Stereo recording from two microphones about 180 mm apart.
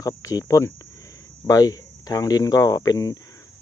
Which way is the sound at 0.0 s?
20° left (ahead or behind).